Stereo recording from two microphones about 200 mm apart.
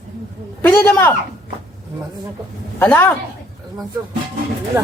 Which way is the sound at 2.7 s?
10° left (ahead or behind).